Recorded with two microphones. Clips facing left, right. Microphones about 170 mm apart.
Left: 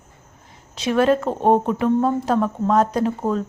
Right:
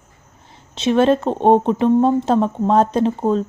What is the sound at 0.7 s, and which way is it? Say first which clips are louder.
Speech: right 3 dB; 25° right (ahead or behind).